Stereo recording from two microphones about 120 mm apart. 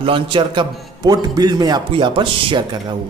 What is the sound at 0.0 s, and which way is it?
A man's voice, 45° right (ahead or behind).